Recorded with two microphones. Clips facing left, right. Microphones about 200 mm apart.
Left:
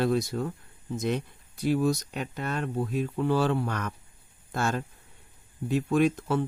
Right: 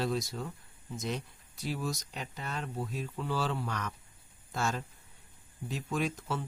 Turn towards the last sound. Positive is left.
turn(degrees=60)  # may be behind; listen again after turning